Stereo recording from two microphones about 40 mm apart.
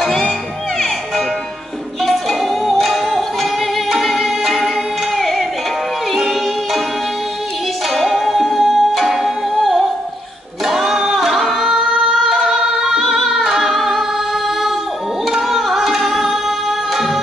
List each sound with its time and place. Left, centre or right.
0.7 s music: centre
7.9 s music: centre
11.9 s singing: right
12.2 s singing: centre
13.3 s music: centre
15.2 s music: centre